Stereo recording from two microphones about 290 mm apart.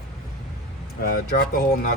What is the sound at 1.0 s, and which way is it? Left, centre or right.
Speech, left.